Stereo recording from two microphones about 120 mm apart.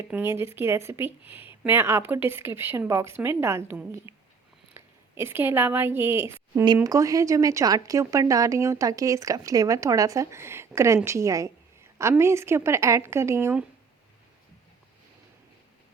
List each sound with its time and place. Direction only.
0.1 s speech: 20° right (ahead or behind)
4.1 s a sound: 25° right (ahead or behind)
4.7 s speech: 20° right (ahead or behind)